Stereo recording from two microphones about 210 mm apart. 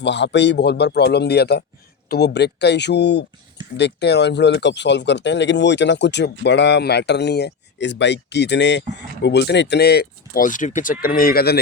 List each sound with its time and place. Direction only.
0.0 s speech: 55° left (ahead or behind)